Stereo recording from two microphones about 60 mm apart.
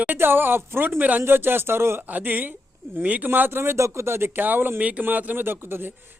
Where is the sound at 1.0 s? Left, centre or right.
Right.